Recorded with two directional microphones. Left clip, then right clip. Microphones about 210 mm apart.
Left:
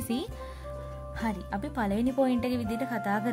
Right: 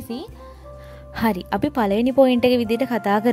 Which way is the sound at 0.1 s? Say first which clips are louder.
Right 1 dB; centre (ahead or behind).